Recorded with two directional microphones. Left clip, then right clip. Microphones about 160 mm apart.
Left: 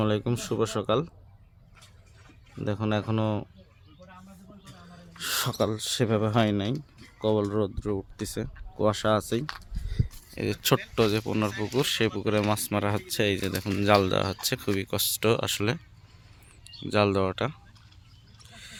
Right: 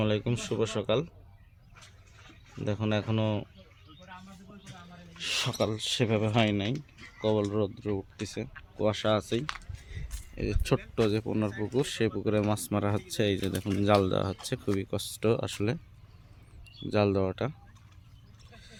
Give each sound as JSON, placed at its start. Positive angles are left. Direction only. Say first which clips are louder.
{"t": 0.0, "sound": "speech", "louder": "left 2 dB", "side_deg": 20}
{"t": 2.6, "sound": "speech", "louder": "left 2 dB", "side_deg": 15}
{"t": 5.1, "sound": "speech", "louder": "left 2 dB", "side_deg": 30}
{"t": 10.1, "sound": "a sound", "louder": "left 3 dB", "side_deg": 15}
{"t": 10.9, "sound": "speech", "louder": "left 3 dB", "side_deg": 0}
{"t": 16.8, "sound": "speech", "louder": "left 3 dB", "side_deg": 0}
{"t": 18.5, "sound": "a sound", "louder": "left 8 dB", "side_deg": 0}